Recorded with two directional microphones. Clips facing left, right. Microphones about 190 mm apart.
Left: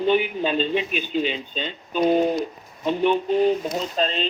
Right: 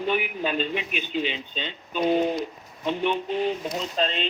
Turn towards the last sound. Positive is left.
turn(degrees=40)  # may be behind; listen again after turning